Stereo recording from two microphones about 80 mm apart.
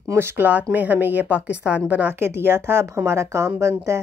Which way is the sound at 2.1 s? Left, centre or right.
Right.